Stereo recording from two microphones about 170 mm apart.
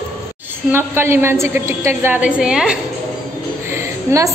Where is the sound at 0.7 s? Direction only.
15° right (ahead or behind).